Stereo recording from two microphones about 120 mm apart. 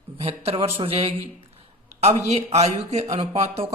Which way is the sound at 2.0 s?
70° right (ahead or behind).